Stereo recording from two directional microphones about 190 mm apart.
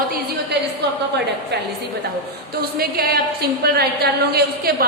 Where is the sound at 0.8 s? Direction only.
60° right (ahead or behind).